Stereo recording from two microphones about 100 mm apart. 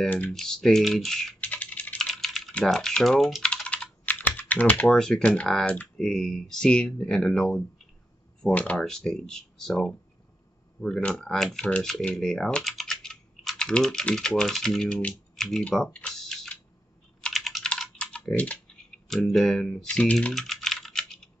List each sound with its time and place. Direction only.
0.0 s speech: 15° left (ahead or behind)
0.3 s speech: 5° left (ahead or behind)
1.4 s computer keyboard: 15° left (ahead or behind)
2.0 s typing: 5° left (ahead or behind)
3.6 s computer keyboard: 10° left (ahead or behind)
4.4 s speech: 15° left (ahead or behind)
17.2 s typing: centre (ahead or behind)
19.0 s speech: 5° left (ahead or behind)
20.3 s computer keyboard: 5° left (ahead or behind)